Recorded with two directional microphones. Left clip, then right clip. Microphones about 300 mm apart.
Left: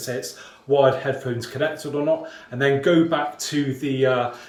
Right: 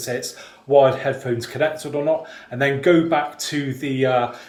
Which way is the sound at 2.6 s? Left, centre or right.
Centre.